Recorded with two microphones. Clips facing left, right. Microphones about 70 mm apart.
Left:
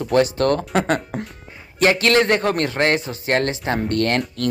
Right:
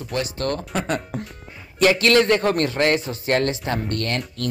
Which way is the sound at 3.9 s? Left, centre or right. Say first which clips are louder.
Left 6 dB; left.